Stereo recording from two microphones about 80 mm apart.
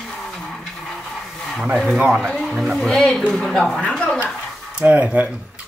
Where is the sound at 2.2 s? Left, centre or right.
Centre.